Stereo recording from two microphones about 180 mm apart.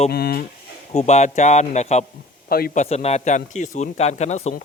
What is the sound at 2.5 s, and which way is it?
Speech, 55° left (ahead or behind).